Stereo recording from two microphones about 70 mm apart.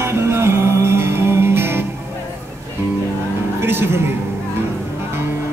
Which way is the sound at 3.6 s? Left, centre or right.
Right.